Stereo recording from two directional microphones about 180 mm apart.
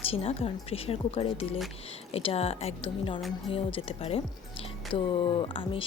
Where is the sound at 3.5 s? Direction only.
30° left (ahead or behind).